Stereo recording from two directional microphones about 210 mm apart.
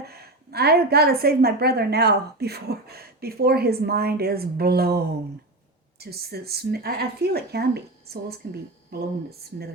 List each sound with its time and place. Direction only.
0.0 s a woman's voice: 50° right (ahead or behind)